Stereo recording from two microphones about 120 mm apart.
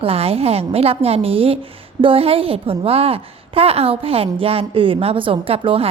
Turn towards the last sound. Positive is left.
turn(degrees=-50)  # may be behind; listen again after turning